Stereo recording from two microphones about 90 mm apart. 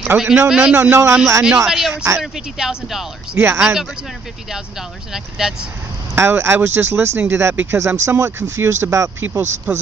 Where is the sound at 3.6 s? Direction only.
5° right (ahead or behind).